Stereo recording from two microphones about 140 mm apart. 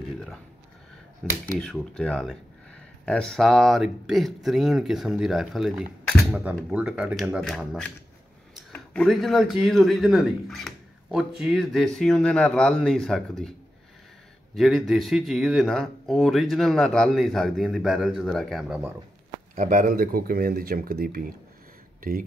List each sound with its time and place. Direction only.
1.2 s speech: 5° left (ahead or behind)
14.5 s speech: centre (ahead or behind)
19.5 s speech: 65° right (ahead or behind); by 21.3 s 90° right